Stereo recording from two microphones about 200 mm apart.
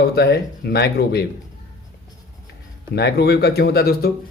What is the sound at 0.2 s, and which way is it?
Speech, 55° left (ahead or behind).